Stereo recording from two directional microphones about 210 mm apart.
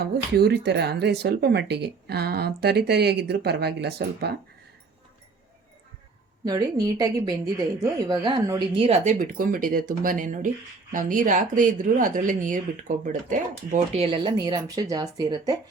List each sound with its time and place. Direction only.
0.0 s speech: 50° right (ahead or behind)
6.4 s a woman's voice: 15° right (ahead or behind)